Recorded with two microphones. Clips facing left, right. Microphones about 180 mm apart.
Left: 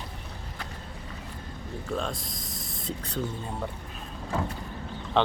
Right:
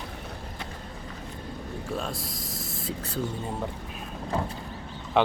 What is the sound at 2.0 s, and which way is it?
Speech, 5° right (ahead or behind).